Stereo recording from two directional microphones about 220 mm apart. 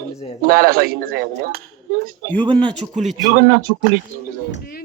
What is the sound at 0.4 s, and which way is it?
Speech, 40° right (ahead or behind).